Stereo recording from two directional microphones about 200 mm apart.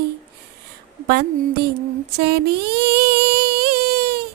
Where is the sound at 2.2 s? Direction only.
50° right (ahead or behind).